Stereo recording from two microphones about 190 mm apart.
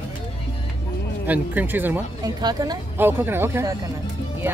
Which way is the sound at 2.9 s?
10° right (ahead or behind).